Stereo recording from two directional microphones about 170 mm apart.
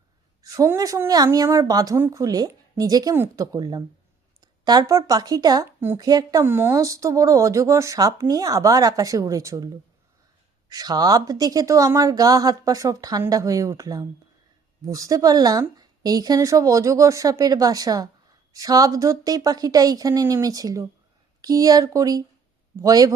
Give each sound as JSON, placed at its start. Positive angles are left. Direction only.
{"t": 0.4, "sound": "speech", "side_deg": -20}
{"t": 10.7, "sound": "speech", "side_deg": -20}